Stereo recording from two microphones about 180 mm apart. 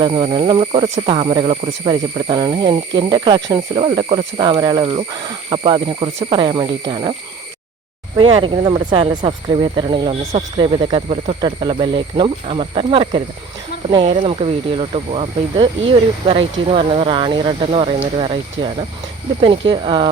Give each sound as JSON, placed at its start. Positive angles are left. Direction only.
{"t": 0.0, "sound": "speech", "side_deg": -30}
{"t": 8.1, "sound": "speech", "side_deg": -25}